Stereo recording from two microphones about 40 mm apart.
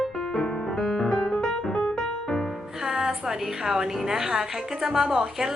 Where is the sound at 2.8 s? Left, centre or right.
Centre.